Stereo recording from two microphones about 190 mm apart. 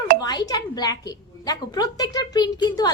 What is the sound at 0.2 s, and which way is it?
A woman's voice, 20° left (ahead or behind).